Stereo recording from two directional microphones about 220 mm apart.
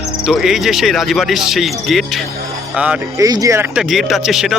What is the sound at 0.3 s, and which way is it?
Speech, centre (ahead or behind).